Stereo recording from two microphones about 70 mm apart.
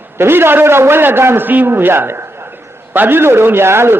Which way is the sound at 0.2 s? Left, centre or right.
Right.